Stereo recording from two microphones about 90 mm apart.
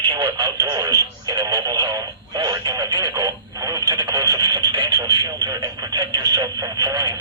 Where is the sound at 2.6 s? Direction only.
40° right (ahead or behind).